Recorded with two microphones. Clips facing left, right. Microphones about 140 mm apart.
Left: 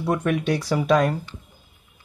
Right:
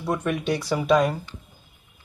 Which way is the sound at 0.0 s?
Centre (ahead or behind).